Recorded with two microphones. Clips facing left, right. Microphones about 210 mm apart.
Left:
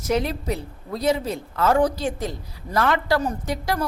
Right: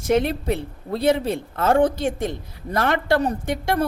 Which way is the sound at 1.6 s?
25° right (ahead or behind).